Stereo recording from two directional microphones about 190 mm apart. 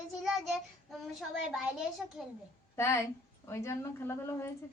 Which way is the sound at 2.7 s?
15° left (ahead or behind).